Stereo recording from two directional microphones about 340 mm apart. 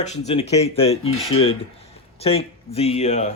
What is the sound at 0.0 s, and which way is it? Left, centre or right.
Speech, centre.